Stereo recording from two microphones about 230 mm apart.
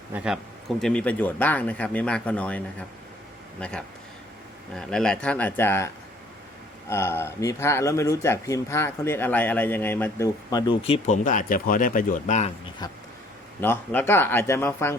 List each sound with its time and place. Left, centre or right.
0.8 s speech: centre
3.6 s speech: centre; by 12.5 s left
12.8 s speech: centre